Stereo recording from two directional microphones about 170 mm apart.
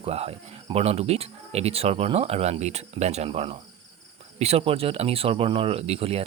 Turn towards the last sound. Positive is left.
turn(degrees=-35)  # may be behind; listen again after turning